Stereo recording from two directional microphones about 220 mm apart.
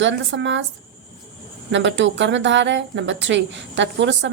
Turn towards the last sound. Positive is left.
turn(degrees=-55)  # may be behind; listen again after turning